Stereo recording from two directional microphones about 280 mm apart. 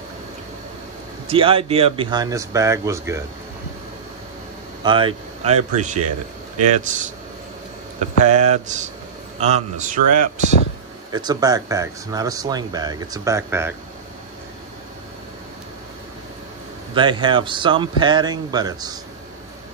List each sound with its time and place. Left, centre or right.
1.2 s speech: centre
4.8 s a man's voice: centre
8.2 s a man's voice: right
11.1 s speech: centre
16.9 s speech: centre